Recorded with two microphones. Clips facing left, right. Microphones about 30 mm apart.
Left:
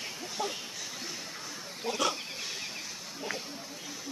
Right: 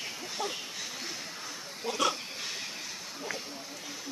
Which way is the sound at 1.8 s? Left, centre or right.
Centre.